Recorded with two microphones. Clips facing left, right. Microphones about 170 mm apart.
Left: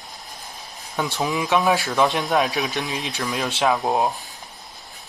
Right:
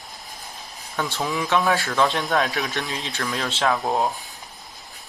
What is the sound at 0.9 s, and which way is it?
Speech, 15° left (ahead or behind).